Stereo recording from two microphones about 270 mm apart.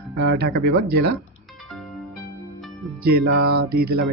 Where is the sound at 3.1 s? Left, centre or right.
Right.